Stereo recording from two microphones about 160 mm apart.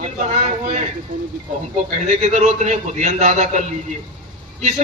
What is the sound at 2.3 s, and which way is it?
A man's voice, 50° right (ahead or behind).